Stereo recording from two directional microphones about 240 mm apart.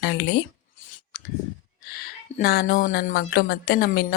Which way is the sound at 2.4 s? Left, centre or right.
Left.